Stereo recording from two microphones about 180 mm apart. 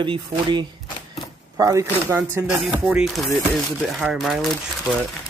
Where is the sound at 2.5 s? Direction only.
Centre (ahead or behind).